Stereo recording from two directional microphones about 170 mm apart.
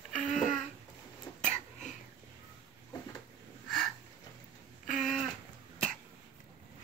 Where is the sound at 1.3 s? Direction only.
15° left (ahead or behind).